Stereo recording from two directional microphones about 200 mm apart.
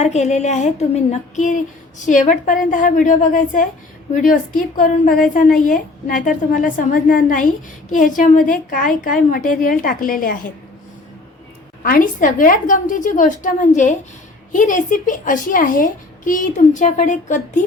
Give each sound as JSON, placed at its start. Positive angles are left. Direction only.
{"t": 0.0, "sound": "a child's voice", "side_deg": 35}
{"t": 11.8, "sound": "a child's voice", "side_deg": 45}